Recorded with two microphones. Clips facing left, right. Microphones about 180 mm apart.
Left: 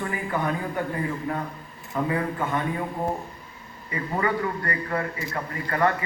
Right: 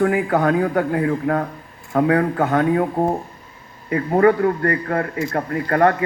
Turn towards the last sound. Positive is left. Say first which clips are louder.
# right 7 dB
turn(degrees=-55)  # may be behind; listen again after turning